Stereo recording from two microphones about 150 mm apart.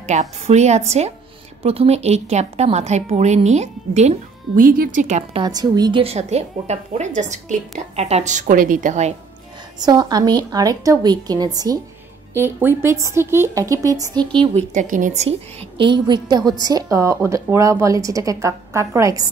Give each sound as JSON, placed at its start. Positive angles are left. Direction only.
{"t": 0.0, "sound": "a woman's voice", "side_deg": -50}
{"t": 4.6, "sound": "speech", "side_deg": -65}
{"t": 5.4, "sound": "a woman's voice", "side_deg": -25}
{"t": 9.8, "sound": "a woman's voice", "side_deg": -25}
{"t": 12.4, "sound": "speech", "side_deg": -15}
{"t": 14.5, "sound": "speech", "side_deg": -55}
{"t": 15.8, "sound": "a woman's voice", "side_deg": -30}